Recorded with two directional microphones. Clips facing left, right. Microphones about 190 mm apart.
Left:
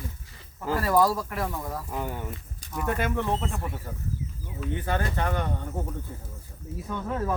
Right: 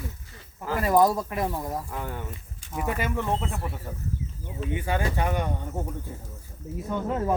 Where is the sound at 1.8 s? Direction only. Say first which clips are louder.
Left 2 dB; 15° left (ahead or behind).